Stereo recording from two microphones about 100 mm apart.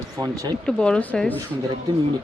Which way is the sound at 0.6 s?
10° left (ahead or behind).